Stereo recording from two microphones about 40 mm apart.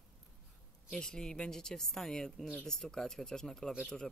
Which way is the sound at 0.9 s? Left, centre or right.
Centre.